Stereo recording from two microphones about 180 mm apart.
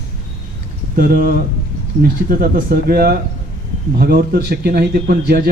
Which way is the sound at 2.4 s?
50° right (ahead or behind).